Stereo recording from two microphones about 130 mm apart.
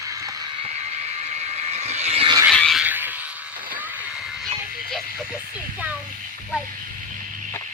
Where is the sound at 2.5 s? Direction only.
5° left (ahead or behind).